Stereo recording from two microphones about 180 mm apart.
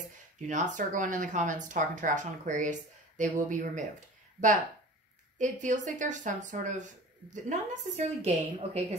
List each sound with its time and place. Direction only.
0.5 s speech: 45° right (ahead or behind)
5.4 s speech: 45° right (ahead or behind)